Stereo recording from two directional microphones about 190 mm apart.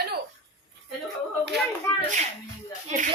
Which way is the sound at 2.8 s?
40° right (ahead or behind).